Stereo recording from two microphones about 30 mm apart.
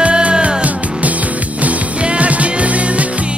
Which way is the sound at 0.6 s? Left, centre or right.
Right.